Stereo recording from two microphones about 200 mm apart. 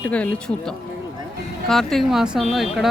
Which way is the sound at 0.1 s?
5° left (ahead or behind).